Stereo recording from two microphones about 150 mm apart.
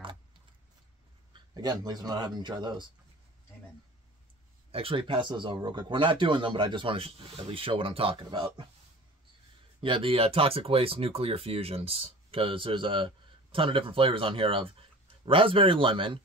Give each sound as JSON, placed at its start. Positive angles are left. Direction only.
{"t": 1.3, "sound": "speech", "side_deg": -25}
{"t": 4.6, "sound": "speech", "side_deg": -40}
{"t": 9.8, "sound": "speech", "side_deg": -35}